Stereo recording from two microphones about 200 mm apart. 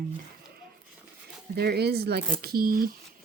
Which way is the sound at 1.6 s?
55° right (ahead or behind).